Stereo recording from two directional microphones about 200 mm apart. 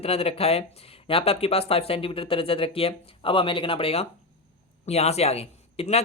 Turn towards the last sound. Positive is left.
turn(degrees=30)  # may be behind; listen again after turning